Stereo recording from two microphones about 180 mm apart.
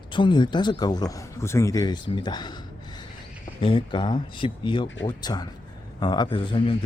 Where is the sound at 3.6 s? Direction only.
30° left (ahead or behind).